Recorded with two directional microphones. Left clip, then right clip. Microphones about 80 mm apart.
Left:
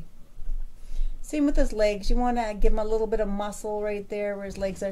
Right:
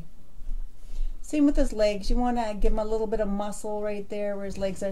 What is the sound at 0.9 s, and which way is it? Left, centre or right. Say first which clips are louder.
A woman's voice: right 2 dB; left.